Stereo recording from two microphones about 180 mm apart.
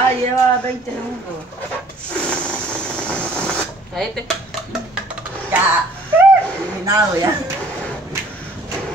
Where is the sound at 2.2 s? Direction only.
5° left (ahead or behind).